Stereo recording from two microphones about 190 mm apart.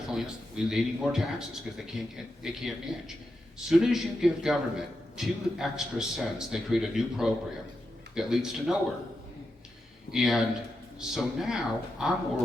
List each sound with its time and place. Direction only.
0.1 s a man's voice: 5° right (ahead or behind)
10.1 s a man's voice: centre (ahead or behind)